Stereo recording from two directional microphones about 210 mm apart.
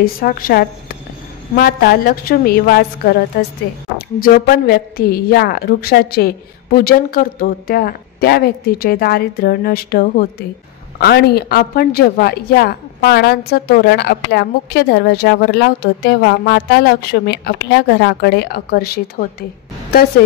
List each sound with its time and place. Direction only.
0.0 s a woman's voice: 45° left (ahead or behind)
4.2 s a woman's voice: 45° left (ahead or behind)